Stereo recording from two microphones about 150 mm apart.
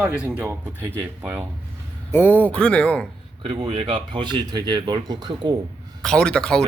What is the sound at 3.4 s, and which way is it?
Speech, 35° right (ahead or behind).